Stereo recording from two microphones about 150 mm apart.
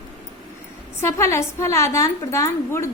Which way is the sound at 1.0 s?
20° left (ahead or behind).